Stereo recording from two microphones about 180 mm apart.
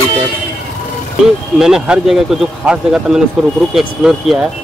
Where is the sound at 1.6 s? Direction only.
5° right (ahead or behind).